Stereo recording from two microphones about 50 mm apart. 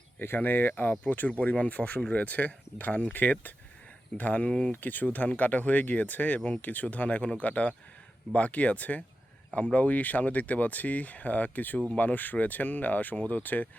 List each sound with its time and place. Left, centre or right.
0.2 s speech: left
1.3 s speech: left
4.4 s speech: centre
4.7 s speech: left